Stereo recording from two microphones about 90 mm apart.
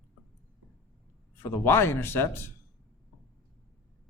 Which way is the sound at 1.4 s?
25° left (ahead or behind).